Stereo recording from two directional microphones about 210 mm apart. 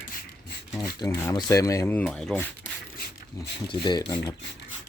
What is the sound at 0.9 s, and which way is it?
Speech, 15° left (ahead or behind).